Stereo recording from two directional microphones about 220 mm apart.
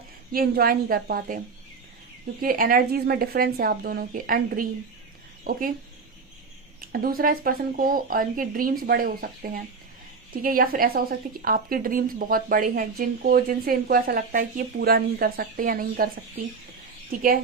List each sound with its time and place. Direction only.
0.3 s a woman's voice: 45° right (ahead or behind)
2.4 s a woman's voice: 40° right (ahead or behind)
6.9 s a woman's voice: 40° right (ahead or behind)